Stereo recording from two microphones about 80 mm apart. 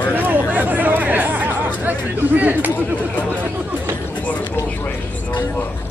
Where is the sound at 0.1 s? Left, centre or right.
Right.